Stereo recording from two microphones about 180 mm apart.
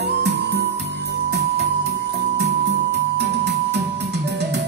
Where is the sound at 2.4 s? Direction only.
70° right (ahead or behind).